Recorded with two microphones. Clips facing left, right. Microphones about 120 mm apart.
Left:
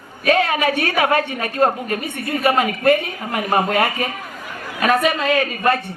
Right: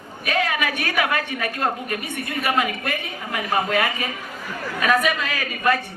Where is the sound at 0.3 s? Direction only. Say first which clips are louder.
Left 6 dB; 40° left (ahead or behind).